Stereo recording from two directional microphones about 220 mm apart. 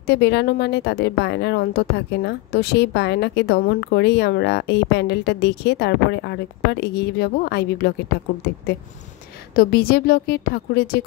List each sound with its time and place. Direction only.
0.0 s a woman's voice: 50° left (ahead or behind)
9.6 s a woman's voice: 45° left (ahead or behind)